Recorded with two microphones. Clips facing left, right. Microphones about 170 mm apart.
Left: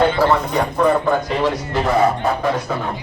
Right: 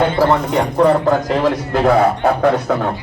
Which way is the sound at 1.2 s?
50° right (ahead or behind).